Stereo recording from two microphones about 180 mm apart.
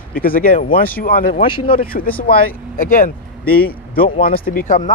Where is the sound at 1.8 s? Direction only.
50° left (ahead or behind).